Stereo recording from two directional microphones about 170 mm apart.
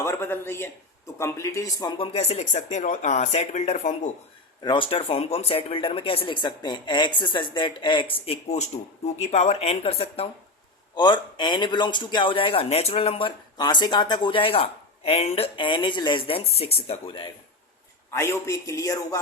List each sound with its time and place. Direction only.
0.0 s a man's voice: 15° left (ahead or behind); by 4.1 s 40° left (ahead or behind)
4.6 s speech: 30° left (ahead or behind)
10.9 s a man's voice: 25° left (ahead or behind)
18.1 s a man's voice: 15° left (ahead or behind)